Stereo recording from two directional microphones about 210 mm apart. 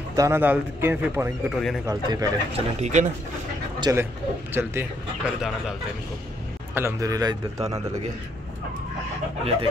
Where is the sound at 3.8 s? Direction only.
10° right (ahead or behind).